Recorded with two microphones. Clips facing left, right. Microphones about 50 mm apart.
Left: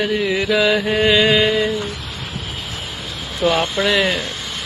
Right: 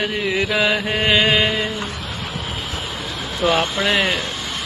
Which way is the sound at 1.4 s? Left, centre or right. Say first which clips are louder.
Left 3 dB; centre.